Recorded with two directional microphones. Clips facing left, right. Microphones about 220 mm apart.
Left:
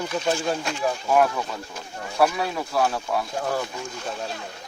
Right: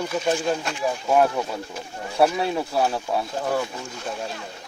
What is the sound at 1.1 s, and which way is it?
Speech, 30° right (ahead or behind).